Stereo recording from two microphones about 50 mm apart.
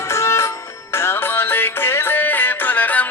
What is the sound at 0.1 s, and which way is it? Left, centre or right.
Music, left.